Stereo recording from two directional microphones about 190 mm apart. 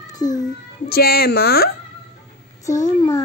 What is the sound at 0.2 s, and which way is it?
Speech, 20° left (ahead or behind).